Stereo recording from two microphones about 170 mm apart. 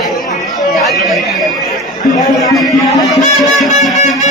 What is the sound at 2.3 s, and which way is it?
A man's voice, centre (ahead or behind).